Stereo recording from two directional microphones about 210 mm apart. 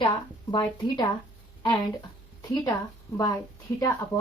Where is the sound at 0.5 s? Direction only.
20° left (ahead or behind).